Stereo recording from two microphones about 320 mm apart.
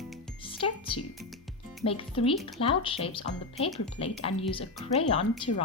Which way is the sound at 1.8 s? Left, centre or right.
Centre.